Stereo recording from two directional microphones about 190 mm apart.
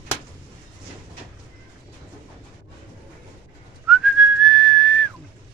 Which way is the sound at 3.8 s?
Centre (ahead or behind).